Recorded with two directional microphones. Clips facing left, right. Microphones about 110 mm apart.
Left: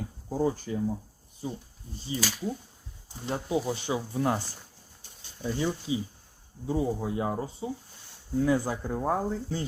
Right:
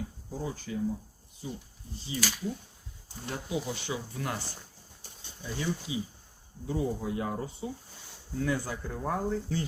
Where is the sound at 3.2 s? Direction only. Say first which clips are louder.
Left 5 dB; 30° left (ahead or behind).